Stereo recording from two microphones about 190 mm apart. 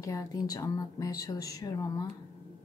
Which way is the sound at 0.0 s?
20° left (ahead or behind).